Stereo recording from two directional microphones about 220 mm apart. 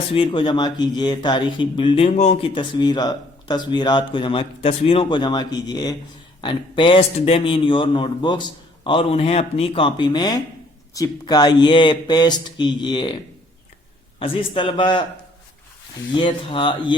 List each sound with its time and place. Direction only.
0.1 s speech: 25° left (ahead or behind)
14.2 s speech: 25° left (ahead or behind)
16.1 s speech: 20° left (ahead or behind)